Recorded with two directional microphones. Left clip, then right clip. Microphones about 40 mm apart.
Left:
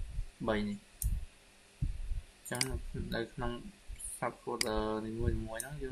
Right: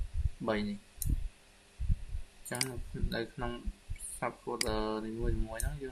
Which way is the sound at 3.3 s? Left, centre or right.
Centre.